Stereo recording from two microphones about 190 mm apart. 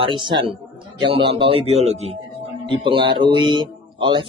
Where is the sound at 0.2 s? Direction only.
25° right (ahead or behind).